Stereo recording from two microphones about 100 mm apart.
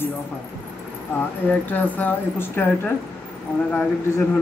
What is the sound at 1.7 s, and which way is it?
Speech, 15° left (ahead or behind).